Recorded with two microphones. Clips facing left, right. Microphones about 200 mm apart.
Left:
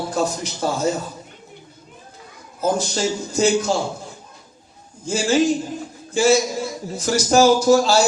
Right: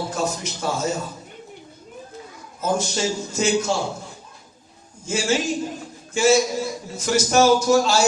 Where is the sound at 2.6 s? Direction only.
35° left (ahead or behind).